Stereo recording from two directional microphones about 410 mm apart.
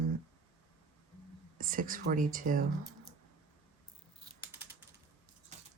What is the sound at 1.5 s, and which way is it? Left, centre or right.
Speech, centre.